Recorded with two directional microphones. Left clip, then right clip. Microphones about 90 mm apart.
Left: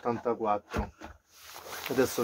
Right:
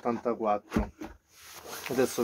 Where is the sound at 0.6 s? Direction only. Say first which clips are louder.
Right 2 dB; 70° right (ahead or behind).